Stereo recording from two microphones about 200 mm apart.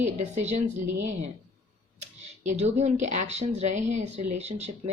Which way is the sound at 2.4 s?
35° right (ahead or behind).